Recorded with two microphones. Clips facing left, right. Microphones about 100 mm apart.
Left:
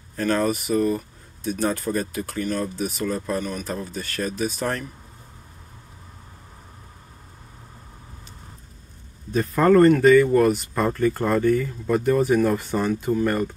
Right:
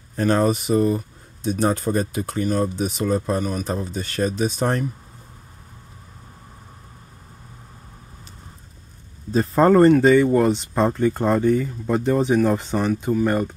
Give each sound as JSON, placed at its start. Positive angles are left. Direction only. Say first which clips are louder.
{"t": 0.1, "sound": "speech", "louder": "right 3 dB", "side_deg": -25}
{"t": 9.3, "sound": "speech", "louder": "right 2 dB", "side_deg": -30}